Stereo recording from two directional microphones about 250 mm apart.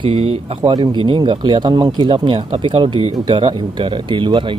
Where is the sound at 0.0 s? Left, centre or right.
Right.